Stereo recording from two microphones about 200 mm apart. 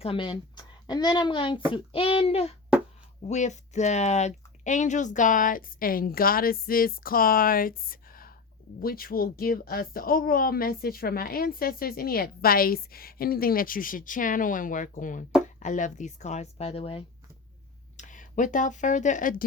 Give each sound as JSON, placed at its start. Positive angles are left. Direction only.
{"t": 0.0, "sound": "a woman's voice", "side_deg": 25}
{"t": 17.9, "sound": "speech", "side_deg": 40}